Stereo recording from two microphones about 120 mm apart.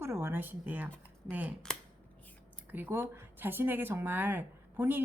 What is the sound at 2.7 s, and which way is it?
Speech, 15° right (ahead or behind).